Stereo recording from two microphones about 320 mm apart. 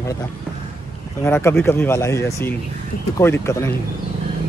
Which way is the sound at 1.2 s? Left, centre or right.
Centre.